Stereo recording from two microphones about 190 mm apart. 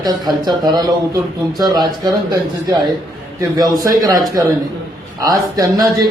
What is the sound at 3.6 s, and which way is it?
A man's voice, 20° right (ahead or behind).